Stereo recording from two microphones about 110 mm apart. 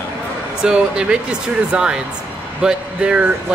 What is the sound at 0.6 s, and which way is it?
Speech, 10° right (ahead or behind).